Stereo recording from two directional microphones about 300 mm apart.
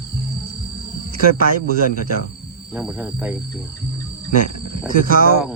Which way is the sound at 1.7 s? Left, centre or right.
Right.